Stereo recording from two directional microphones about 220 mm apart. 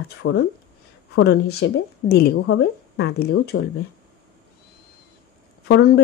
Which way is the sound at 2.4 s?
60° left (ahead or behind).